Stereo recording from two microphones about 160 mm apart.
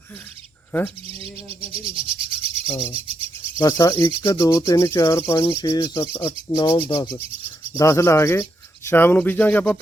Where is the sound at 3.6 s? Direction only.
20° left (ahead or behind).